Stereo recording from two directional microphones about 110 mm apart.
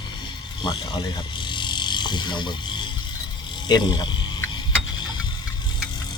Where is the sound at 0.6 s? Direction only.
45° left (ahead or behind).